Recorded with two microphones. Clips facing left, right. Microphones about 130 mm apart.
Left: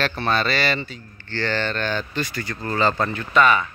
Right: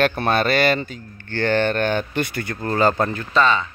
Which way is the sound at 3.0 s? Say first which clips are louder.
Even; 35° right (ahead or behind).